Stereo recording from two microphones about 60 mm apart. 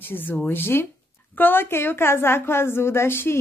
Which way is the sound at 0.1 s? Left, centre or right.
Left.